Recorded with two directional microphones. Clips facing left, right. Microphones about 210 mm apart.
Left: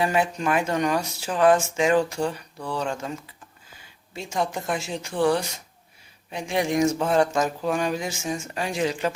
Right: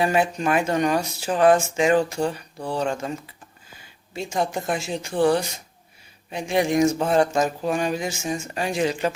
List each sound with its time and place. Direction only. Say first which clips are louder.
0.0 s speech: right 2 dB; 30° right (ahead or behind)
4.4 s speech: right 2 dB; 30° right (ahead or behind)